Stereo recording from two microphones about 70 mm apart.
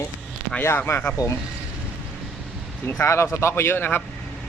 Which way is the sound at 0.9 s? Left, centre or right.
Left.